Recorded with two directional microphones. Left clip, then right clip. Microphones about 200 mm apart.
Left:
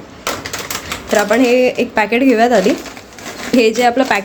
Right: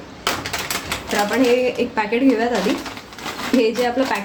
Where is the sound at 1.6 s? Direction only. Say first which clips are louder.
Left 6 dB; 50° left (ahead or behind).